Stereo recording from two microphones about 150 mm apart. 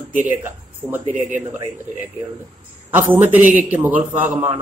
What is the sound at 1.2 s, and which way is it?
Speech, 55° right (ahead or behind).